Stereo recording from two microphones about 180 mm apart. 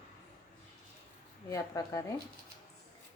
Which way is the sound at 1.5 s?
20° left (ahead or behind).